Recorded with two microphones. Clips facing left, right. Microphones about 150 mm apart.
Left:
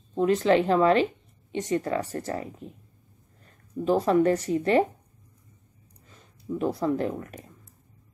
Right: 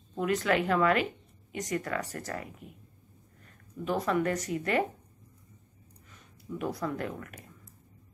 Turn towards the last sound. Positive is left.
turn(degrees=30)  # may be behind; listen again after turning